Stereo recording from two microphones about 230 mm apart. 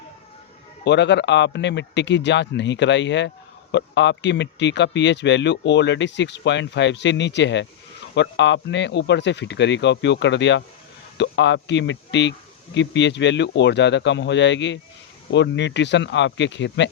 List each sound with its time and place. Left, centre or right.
0.9 s speech: left